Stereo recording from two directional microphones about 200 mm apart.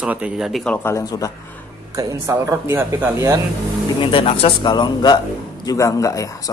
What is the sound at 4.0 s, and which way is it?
Speech, 25° left (ahead or behind).